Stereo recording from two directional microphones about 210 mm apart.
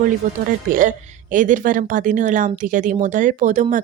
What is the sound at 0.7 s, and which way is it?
Speech, 40° right (ahead or behind).